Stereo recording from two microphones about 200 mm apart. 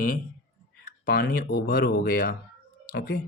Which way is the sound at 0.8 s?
50° left (ahead or behind).